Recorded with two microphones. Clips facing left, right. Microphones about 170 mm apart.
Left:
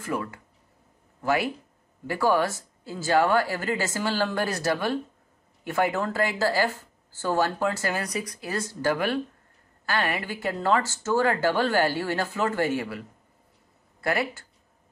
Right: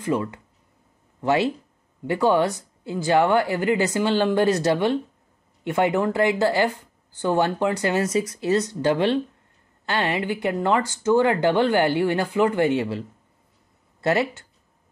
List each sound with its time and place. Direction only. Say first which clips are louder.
0.0 s speech: right 6 dB; 20° right (ahead or behind)
14.0 s speech: right 5 dB; 20° right (ahead or behind)